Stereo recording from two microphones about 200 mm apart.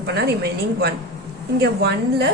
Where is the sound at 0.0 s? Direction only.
55° right (ahead or behind).